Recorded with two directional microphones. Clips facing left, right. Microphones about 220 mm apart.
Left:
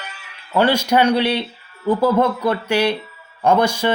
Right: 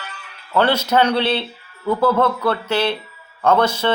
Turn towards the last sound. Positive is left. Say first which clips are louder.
# even
turn(degrees=10)  # may be behind; listen again after turning